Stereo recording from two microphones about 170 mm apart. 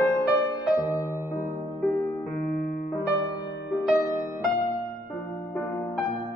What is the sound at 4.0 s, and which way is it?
Music, 20° left (ahead or behind).